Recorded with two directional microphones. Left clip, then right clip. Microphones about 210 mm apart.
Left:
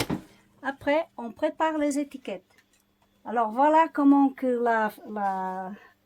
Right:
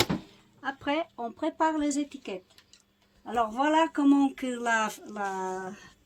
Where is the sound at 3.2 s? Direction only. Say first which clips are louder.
Left 4 dB; 30° left (ahead or behind).